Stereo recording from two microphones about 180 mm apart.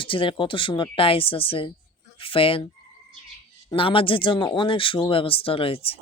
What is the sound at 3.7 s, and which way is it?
Speech, 30° left (ahead or behind).